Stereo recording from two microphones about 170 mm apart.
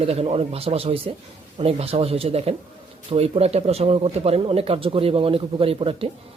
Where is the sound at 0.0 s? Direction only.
35° right (ahead or behind).